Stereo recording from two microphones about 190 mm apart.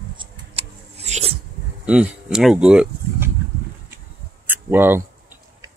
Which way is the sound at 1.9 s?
5° right (ahead or behind).